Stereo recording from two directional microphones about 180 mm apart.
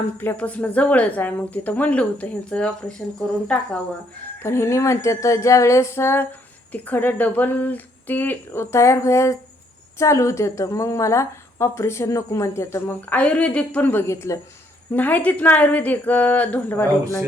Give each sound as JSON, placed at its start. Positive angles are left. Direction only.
{"t": 0.2, "sound": "a woman's voice", "side_deg": 10}